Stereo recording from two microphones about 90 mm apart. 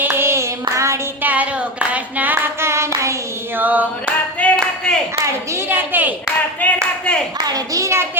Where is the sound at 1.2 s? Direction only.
20° right (ahead or behind).